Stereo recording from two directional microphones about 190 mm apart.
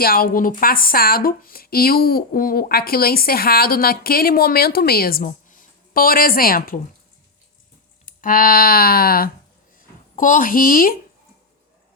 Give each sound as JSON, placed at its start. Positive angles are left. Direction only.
{"t": 0.0, "sound": "speech", "side_deg": 50}
{"t": 8.0, "sound": "speech", "side_deg": 45}